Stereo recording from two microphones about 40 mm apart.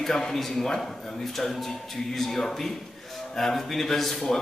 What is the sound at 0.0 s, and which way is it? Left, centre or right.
A man's voice, centre.